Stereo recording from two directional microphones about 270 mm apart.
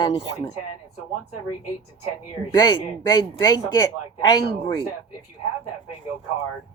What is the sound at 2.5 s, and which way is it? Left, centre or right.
A man's voice, centre.